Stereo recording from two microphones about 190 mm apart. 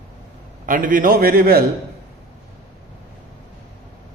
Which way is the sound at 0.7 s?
45° right (ahead or behind).